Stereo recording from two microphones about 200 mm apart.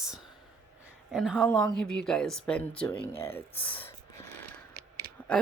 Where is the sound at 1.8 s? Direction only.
5° left (ahead or behind).